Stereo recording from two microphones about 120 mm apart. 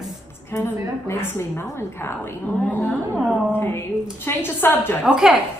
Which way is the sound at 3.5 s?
20° left (ahead or behind).